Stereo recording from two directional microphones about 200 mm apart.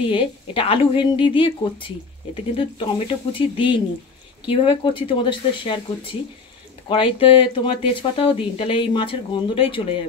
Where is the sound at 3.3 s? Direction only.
25° left (ahead or behind).